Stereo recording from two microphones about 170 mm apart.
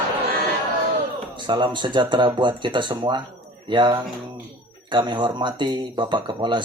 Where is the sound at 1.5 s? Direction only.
25° right (ahead or behind).